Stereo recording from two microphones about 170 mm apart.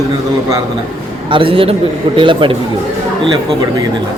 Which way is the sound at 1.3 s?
30° right (ahead or behind).